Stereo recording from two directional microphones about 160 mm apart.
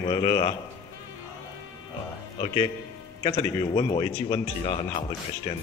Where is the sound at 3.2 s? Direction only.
30° left (ahead or behind).